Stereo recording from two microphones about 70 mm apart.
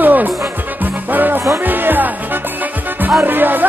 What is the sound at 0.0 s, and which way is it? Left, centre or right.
Music, right.